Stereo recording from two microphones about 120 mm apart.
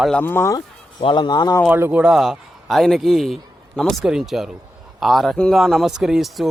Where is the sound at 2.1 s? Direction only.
Centre (ahead or behind).